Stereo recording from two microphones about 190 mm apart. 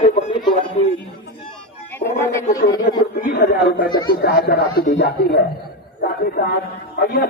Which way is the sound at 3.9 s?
20° left (ahead or behind).